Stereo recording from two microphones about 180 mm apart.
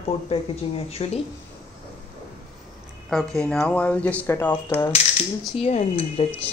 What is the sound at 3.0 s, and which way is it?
Speech, centre (ahead or behind).